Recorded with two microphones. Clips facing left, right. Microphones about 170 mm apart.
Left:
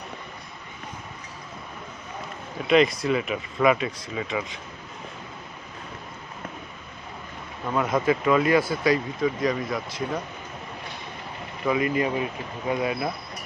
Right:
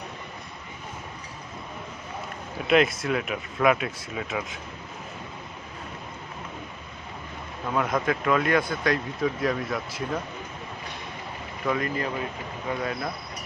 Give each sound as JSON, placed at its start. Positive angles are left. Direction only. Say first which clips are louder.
{"t": 2.6, "sound": "speech", "louder": "left 2 dB", "side_deg": -5}
{"t": 7.7, "sound": "speech", "louder": "left 3 dB", "side_deg": 0}
{"t": 11.6, "sound": "speech", "louder": "left 4 dB", "side_deg": 5}